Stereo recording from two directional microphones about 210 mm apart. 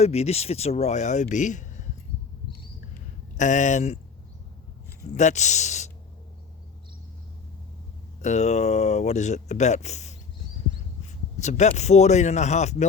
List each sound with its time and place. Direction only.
0.0 s speech: 30° left (ahead or behind)
3.3 s speech: 35° left (ahead or behind)
5.1 s speech: 35° left (ahead or behind)
8.2 s speech: 35° left (ahead or behind)
11.3 s speech: 35° left (ahead or behind)